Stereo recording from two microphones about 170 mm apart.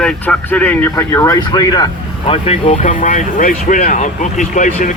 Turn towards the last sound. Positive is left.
turn(degrees=50)  # may be behind; listen again after turning